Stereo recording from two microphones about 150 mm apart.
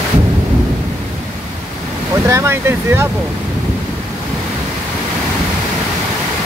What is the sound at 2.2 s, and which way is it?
Speech, 20° right (ahead or behind).